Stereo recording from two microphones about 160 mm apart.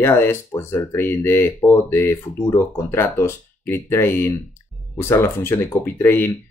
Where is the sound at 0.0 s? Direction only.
15° left (ahead or behind).